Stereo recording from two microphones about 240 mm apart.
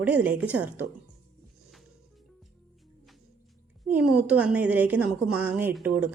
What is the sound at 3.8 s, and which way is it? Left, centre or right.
A woman's voice, centre.